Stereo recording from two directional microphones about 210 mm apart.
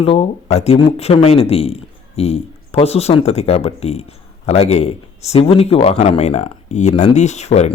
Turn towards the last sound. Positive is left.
turn(degrees=30)  # may be behind; listen again after turning